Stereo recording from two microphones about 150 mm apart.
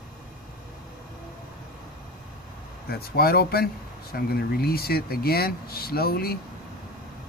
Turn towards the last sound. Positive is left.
turn(degrees=90)